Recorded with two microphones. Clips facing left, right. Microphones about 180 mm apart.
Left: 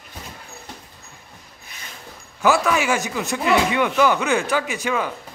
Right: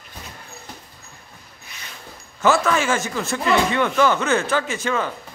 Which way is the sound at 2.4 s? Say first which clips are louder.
Even; 10° left (ahead or behind).